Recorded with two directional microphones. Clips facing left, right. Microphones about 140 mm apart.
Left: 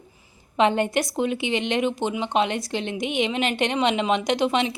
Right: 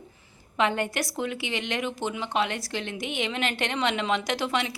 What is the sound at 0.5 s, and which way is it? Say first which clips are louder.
A woman's voice: left 6 dB; 20° left (ahead or behind).